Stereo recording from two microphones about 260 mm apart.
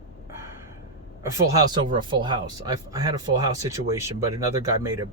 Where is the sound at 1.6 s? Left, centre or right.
Centre.